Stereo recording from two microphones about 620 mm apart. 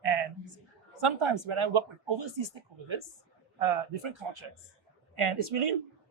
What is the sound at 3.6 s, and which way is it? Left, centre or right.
Speech, right.